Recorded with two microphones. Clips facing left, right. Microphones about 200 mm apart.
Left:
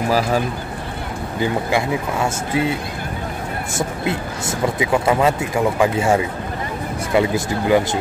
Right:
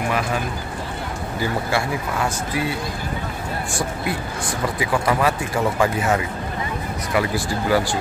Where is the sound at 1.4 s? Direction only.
20° left (ahead or behind).